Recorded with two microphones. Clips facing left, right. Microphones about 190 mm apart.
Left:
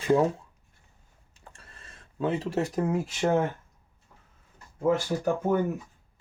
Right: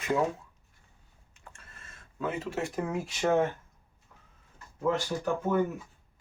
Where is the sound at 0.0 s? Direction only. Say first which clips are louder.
Left 5 dB; 35° left (ahead or behind).